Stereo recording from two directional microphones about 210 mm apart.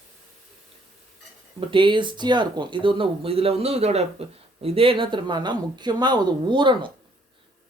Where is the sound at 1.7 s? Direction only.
25° right (ahead or behind).